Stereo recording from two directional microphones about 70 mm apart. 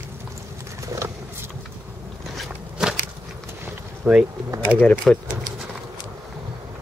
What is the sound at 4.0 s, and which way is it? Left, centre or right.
Speech, centre.